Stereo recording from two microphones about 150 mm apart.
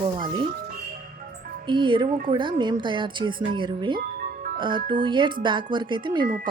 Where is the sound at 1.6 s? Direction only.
30° right (ahead or behind).